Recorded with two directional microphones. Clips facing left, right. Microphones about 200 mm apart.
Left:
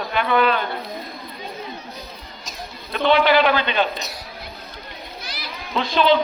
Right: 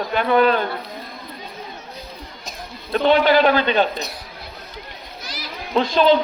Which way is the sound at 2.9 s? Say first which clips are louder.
Right 2 dB; 45° right (ahead or behind).